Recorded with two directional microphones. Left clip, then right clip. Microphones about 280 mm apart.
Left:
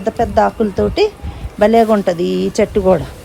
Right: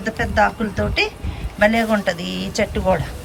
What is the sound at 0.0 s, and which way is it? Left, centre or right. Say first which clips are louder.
A woman's voice: left 4 dB; centre.